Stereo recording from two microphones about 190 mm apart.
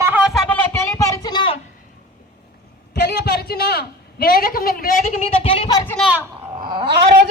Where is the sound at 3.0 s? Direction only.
60° left (ahead or behind).